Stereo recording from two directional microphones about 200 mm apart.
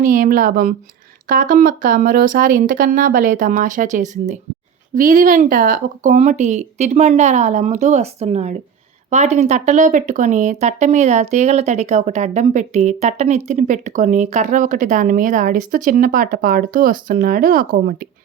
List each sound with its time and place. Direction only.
0.0 s speech: 40° right (ahead or behind)